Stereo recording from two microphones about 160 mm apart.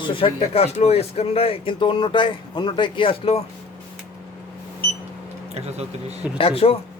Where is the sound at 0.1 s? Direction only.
35° left (ahead or behind).